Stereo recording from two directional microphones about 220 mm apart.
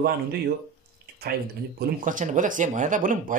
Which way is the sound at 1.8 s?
35° right (ahead or behind).